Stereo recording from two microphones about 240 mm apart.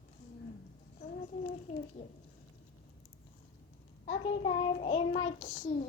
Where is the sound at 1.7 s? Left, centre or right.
Left.